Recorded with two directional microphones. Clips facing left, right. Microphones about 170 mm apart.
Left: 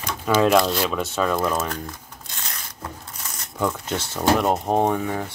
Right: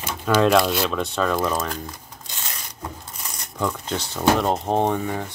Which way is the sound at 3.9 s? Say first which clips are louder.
Even; 15° right (ahead or behind).